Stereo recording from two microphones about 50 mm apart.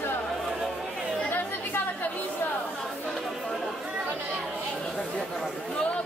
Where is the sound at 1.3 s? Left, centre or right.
Left.